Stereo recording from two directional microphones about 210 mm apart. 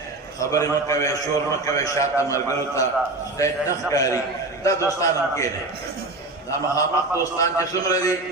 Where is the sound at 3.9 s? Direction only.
15° left (ahead or behind).